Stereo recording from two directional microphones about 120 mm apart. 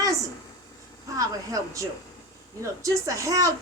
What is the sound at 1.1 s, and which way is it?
Speech, 30° right (ahead or behind).